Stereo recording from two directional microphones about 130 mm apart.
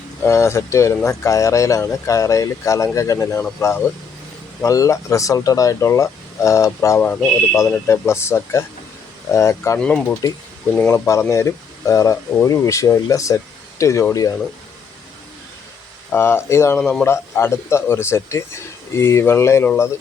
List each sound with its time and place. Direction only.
0.3 s speech: 20° left (ahead or behind)
9.8 s a man's voice: 10° left (ahead or behind)
16.1 s speech: 20° left (ahead or behind)
16.7 s a man's voice: 10° left (ahead or behind)
17.1 s speech: 20° left (ahead or behind)